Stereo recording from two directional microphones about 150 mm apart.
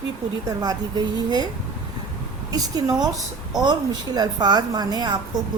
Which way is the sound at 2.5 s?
25° right (ahead or behind).